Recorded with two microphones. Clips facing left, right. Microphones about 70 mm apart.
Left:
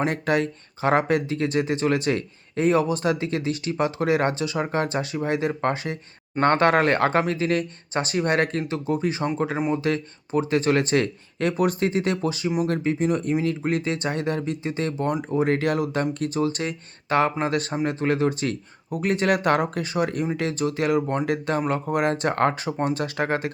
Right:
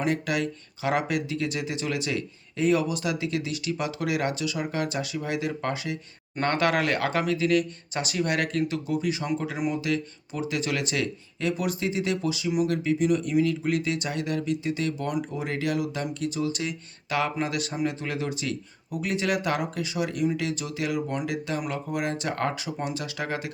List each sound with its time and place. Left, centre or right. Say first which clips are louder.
0.0 s speech: left 4 dB; left